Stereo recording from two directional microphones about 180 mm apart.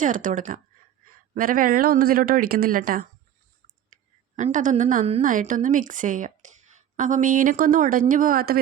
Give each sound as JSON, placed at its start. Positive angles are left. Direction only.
{"t": 0.0, "sound": "a woman's voice", "side_deg": -45}
{"t": 3.9, "sound": "clicking", "side_deg": -45}
{"t": 4.4, "sound": "a woman's voice", "side_deg": -45}